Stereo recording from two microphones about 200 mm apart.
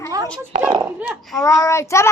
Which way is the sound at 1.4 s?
15° left (ahead or behind).